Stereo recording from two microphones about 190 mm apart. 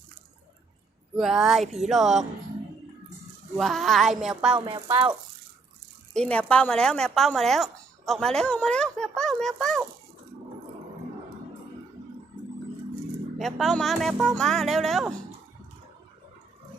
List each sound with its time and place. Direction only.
1.1 s speech: centre (ahead or behind)
3.6 s speech: centre (ahead or behind)
4.5 s speech: 25° right (ahead or behind)
6.1 s speech: 5° left (ahead or behind)
13.4 s speech: centre (ahead or behind)